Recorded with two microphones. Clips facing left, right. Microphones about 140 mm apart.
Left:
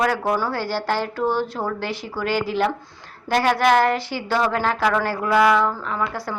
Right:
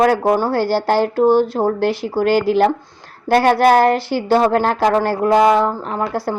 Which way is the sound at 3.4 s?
40° right (ahead or behind).